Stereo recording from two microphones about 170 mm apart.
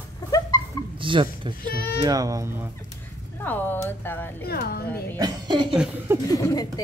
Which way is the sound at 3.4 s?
10° left (ahead or behind).